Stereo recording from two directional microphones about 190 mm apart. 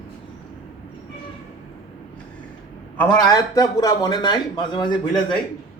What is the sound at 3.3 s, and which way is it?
Speech, 20° left (ahead or behind).